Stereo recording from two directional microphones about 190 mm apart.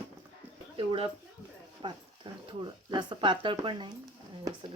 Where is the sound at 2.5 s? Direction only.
25° right (ahead or behind).